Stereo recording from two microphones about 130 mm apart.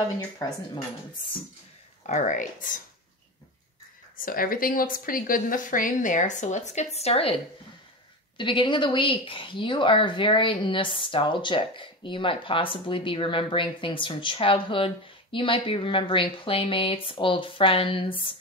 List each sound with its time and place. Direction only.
2.0 s speech: 70° left (ahead or behind); by 2.8 s 90° left
4.2 s a woman's voice: 90° left; by 7.3 s 50° left (ahead or behind)
8.4 s speech: 40° left (ahead or behind)